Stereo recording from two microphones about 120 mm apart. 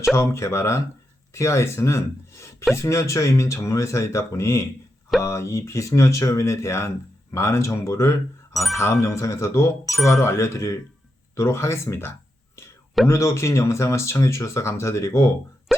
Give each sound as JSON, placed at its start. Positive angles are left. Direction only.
{"t": 0.1, "sound": "speech", "side_deg": 25}